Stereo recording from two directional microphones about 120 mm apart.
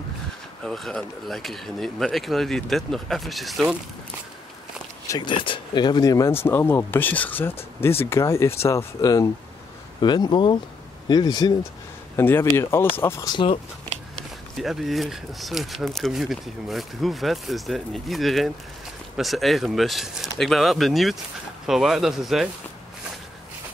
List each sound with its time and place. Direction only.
0.7 s speech: 5° left (ahead or behind)
5.2 s speech: 45° left (ahead or behind); by 9.3 s 25° left (ahead or behind)
9.9 s speech: 40° left (ahead or behind)
12.2 s speech: 20° left (ahead or behind)
14.6 s speech: centre (ahead or behind)